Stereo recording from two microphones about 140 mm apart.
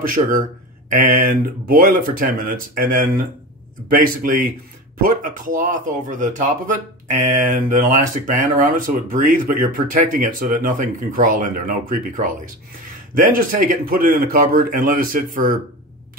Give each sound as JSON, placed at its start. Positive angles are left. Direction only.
{"t": 0.0, "sound": "speech", "side_deg": -75}
{"t": 0.9, "sound": "speech", "side_deg": -90}